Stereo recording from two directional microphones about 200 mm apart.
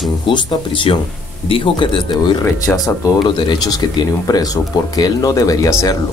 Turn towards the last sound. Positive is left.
turn(degrees=15)  # may be behind; listen again after turning